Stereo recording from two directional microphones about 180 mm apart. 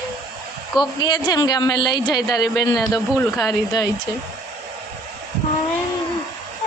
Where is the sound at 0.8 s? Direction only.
25° left (ahead or behind); by 3.6 s 5° left (ahead or behind).